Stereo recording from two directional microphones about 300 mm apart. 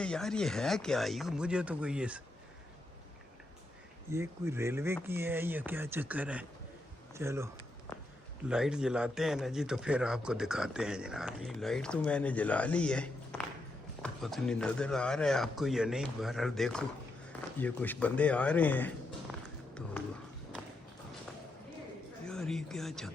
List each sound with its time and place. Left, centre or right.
0.0 s a man's voice: centre
4.1 s a man's voice: centre
22.3 s speech: centre